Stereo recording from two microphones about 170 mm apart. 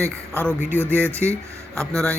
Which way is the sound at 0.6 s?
10° right (ahead or behind).